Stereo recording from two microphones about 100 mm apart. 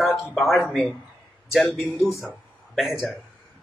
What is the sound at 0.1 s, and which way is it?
Speech, centre (ahead or behind).